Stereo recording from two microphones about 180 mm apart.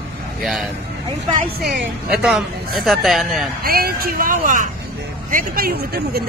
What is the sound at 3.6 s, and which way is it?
Speech, 55° right (ahead or behind).